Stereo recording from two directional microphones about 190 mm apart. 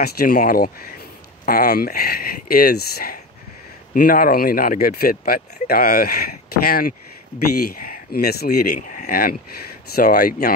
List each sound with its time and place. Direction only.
0.0 s speech: 55° left (ahead or behind)